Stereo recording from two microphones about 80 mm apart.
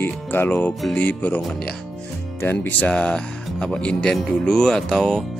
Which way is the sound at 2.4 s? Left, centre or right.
Left.